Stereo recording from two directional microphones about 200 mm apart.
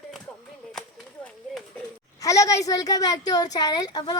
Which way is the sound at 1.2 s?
5° left (ahead or behind).